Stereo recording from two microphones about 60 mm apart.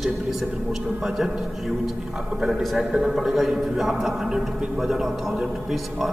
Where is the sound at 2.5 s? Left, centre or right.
Centre.